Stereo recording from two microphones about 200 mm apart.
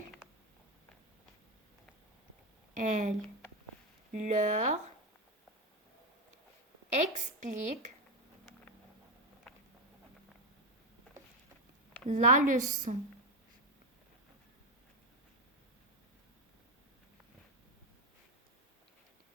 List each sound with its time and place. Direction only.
2.7 s speech: 40° right (ahead or behind)
7.1 s speech: 40° right (ahead or behind)
12.0 s speech: 40° right (ahead or behind)